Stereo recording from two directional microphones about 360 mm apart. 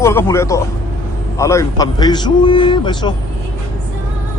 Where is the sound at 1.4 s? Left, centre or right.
Centre.